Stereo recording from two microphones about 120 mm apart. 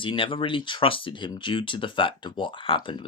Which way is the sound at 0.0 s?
45° left (ahead or behind).